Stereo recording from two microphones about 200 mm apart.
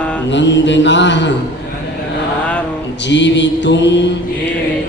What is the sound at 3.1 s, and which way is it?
Mantra, 60° left (ahead or behind).